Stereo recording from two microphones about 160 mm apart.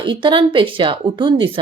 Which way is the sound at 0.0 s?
30° right (ahead or behind).